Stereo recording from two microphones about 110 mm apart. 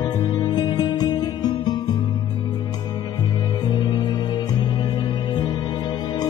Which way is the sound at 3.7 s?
45° left (ahead or behind).